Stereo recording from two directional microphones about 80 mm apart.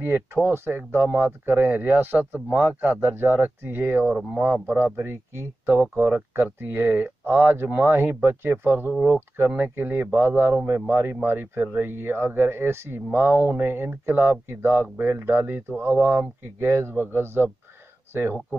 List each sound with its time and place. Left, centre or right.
0.0 s speech: right